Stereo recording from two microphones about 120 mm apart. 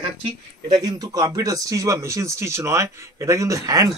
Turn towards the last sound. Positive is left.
turn(degrees=-30)  # may be behind; listen again after turning